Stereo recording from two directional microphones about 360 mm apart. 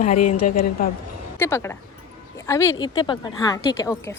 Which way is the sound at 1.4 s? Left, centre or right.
Centre.